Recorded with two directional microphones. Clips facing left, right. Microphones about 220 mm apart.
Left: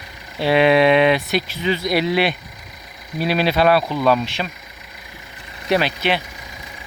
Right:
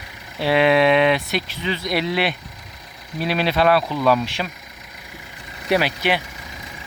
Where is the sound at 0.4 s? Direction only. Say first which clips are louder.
Left 2 dB; centre (ahead or behind).